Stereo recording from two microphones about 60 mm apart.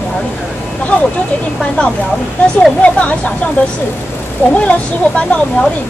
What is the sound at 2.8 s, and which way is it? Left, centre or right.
Speech, left.